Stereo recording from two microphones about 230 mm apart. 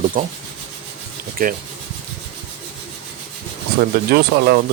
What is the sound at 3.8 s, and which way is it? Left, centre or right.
Speech, right.